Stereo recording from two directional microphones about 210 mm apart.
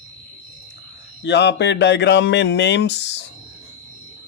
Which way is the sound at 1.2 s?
55° left (ahead or behind).